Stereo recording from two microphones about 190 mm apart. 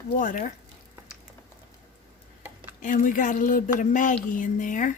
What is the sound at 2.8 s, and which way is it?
A woman's voice, 45° left (ahead or behind).